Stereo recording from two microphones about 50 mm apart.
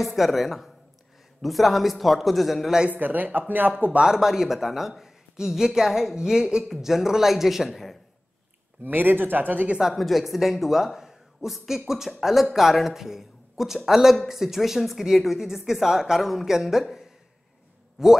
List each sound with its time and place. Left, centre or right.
0.0 s speech: centre
2.9 s speech: right
4.0 s speech: centre
8.8 s speech: right
9.7 s speech: centre
9.9 s speech: centre